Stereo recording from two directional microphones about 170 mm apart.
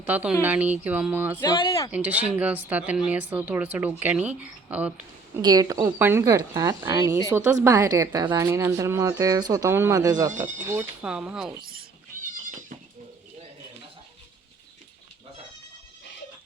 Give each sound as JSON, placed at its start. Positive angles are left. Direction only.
{"t": 0.0, "sound": "speech", "side_deg": -10}
{"t": 1.4, "sound": "speech", "side_deg": 25}
{"t": 1.9, "sound": "speech", "side_deg": -10}
{"t": 5.4, "sound": "a woman's voice", "side_deg": -20}
{"t": 11.0, "sound": "speech", "side_deg": -5}
{"t": 12.2, "sound": "cat", "side_deg": -50}